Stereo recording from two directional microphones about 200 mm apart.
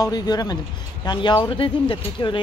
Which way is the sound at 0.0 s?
20° left (ahead or behind).